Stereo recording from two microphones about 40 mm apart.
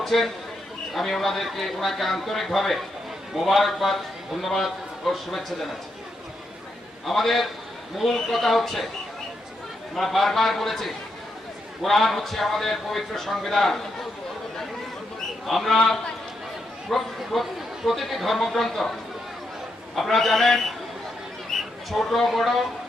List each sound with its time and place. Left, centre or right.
0.0 s a man's voice: centre
7.1 s a man's voice: centre
9.9 s a man's voice: centre
15.4 s a man's voice: centre
20.0 s a man's voice: centre
21.5 s a sound: centre
21.8 s a man's voice: centre